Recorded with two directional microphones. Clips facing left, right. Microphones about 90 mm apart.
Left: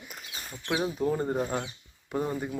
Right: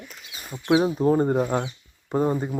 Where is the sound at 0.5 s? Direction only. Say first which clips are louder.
Right 10 dB; 20° right (ahead or behind).